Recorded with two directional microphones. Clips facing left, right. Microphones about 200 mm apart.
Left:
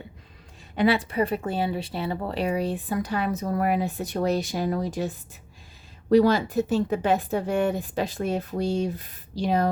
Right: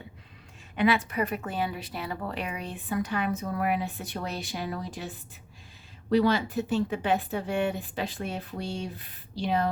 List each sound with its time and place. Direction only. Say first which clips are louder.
0.8 s speech: left 3 dB; 30° left (ahead or behind)